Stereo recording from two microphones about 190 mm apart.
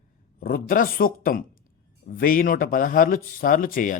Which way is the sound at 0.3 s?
50° left (ahead or behind).